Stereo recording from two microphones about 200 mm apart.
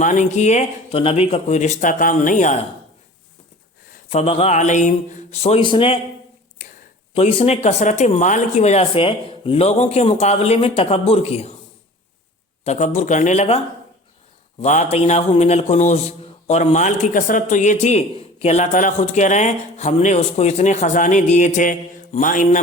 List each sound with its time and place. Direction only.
0.0 s a man's voice: 35° left (ahead or behind)
4.1 s a man's voice: 30° left (ahead or behind)
7.1 s a man's voice: 30° left (ahead or behind)
12.6 s a man's voice: 35° left (ahead or behind)
14.6 s a man's voice: 35° left (ahead or behind)